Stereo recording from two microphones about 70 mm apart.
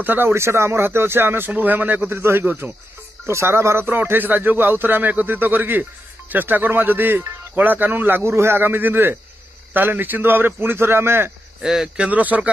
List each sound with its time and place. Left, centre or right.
0.0 s a man's voice: right
0.3 s a man's voice: right
2.0 s a man's voice: right
8.2 s a man's voice: right
11.6 s speech: centre
12.1 s a man's voice: right